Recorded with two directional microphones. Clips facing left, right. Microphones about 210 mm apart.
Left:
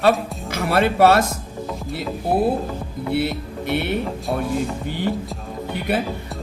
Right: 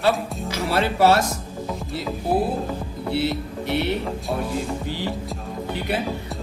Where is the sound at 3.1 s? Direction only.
55° left (ahead or behind).